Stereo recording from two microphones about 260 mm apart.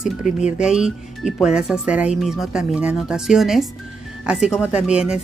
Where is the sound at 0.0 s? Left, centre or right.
Centre.